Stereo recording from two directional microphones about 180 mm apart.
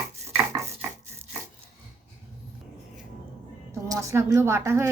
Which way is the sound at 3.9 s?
15° right (ahead or behind).